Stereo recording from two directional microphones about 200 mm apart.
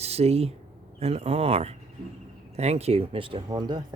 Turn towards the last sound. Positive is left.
turn(degrees=-20)  # may be behind; listen again after turning